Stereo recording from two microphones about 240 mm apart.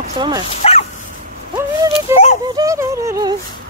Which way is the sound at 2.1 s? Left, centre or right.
Centre.